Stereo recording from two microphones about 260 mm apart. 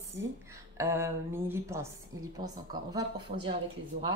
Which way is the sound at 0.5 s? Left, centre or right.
Centre.